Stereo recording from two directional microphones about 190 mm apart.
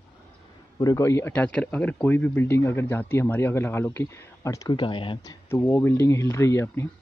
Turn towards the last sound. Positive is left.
turn(degrees=15)  # may be behind; listen again after turning